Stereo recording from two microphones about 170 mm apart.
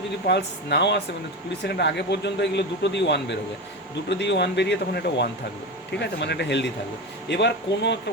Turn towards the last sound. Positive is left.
turn(degrees=85)